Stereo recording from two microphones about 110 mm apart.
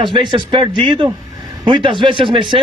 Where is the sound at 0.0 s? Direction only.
50° right (ahead or behind).